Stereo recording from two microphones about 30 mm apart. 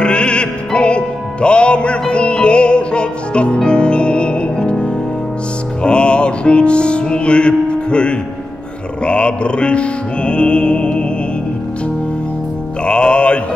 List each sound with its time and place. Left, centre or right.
0.0 s music: left
12.8 s music: left